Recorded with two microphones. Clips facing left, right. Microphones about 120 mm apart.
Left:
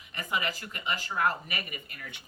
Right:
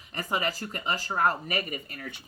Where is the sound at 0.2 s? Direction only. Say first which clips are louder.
Right 3 dB; 35° right (ahead or behind).